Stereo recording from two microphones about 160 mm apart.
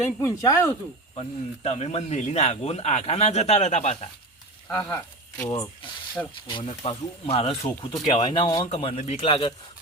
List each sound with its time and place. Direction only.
0.2 s speech: 20° left (ahead or behind)
1.1 s speech: 40° left (ahead or behind)
4.9 s speech: 15° left (ahead or behind)
5.5 s speech: 35° left (ahead or behind)
8.0 s speech: 30° left (ahead or behind)